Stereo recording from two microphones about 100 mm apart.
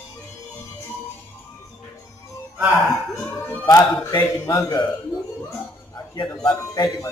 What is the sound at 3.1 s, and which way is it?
Music, 30° left (ahead or behind).